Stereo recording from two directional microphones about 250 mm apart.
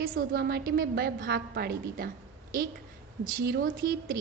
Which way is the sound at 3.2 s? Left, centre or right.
Right.